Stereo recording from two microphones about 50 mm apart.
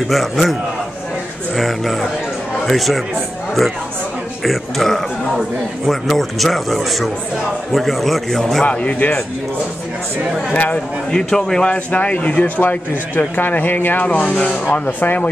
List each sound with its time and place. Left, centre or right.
0.1 s speech: centre
1.6 s a man's voice: centre
4.5 s speech: centre
8.6 s a man's voice: left
10.5 s speech: left
11.1 s speech: centre
11.6 s a man's voice: left
14.2 s speech: left
14.9 s a man's voice: left